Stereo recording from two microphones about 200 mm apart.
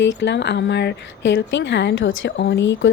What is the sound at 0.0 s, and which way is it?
Speech, 65° left (ahead or behind).